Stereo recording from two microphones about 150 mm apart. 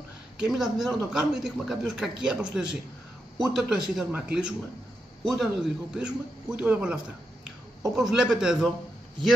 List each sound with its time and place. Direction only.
0.4 s a man's voice: centre (ahead or behind)